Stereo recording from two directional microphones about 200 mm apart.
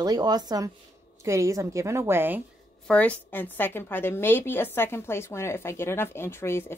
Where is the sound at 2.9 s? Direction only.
5° left (ahead or behind).